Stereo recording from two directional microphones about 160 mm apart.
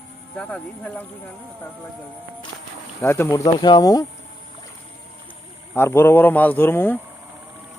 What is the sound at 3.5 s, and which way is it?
Speech, 25° left (ahead or behind).